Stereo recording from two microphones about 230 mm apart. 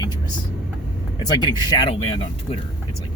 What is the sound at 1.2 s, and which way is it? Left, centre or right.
Speech, centre.